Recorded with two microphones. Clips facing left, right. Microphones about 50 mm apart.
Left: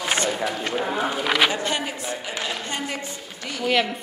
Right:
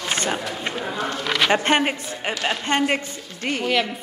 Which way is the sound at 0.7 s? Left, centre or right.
Centre.